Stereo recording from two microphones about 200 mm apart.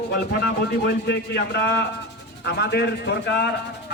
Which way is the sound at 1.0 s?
55° left (ahead or behind).